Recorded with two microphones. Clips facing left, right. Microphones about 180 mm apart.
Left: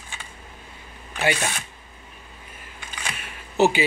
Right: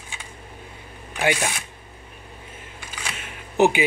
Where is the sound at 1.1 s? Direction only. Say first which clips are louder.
Right 1 dB; 15° right (ahead or behind).